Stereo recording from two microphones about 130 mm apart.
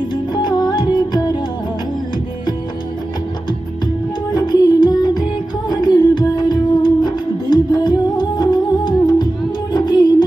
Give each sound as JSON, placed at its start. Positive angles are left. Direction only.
{"t": 0.1, "sound": "music", "side_deg": 35}
{"t": 4.3, "sound": "music", "side_deg": 30}